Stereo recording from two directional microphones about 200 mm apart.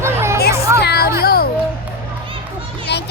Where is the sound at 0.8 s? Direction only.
55° left (ahead or behind).